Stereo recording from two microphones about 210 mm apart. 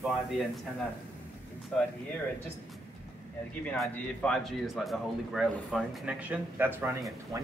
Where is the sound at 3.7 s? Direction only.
5° left (ahead or behind).